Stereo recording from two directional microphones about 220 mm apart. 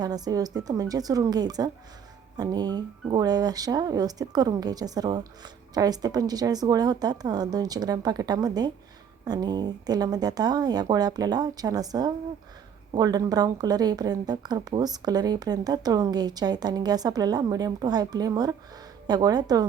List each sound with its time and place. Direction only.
0.0 s speech: 15° right (ahead or behind)